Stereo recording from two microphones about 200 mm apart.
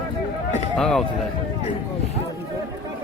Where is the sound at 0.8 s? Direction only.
Centre (ahead or behind).